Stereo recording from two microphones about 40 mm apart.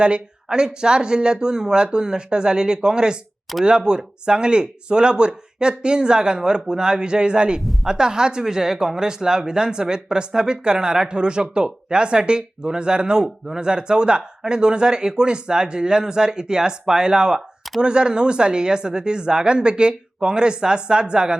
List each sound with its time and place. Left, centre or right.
0.0 s speech: right